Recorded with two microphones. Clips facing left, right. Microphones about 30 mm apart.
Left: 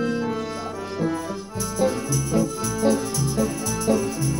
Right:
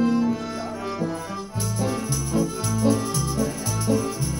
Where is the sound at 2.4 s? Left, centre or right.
Centre.